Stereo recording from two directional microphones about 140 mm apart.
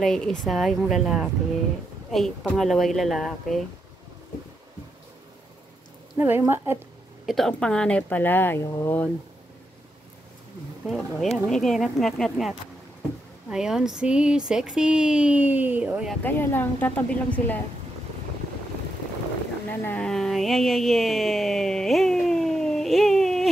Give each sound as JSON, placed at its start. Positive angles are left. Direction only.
{"t": 0.0, "sound": "speech", "side_deg": 5}
{"t": 6.1, "sound": "speech", "side_deg": -15}
{"t": 7.2, "sound": "speech", "side_deg": 0}
{"t": 10.9, "sound": "speech", "side_deg": 0}
{"t": 16.2, "sound": "speech", "side_deg": 15}
{"t": 19.9, "sound": "a sound", "side_deg": 5}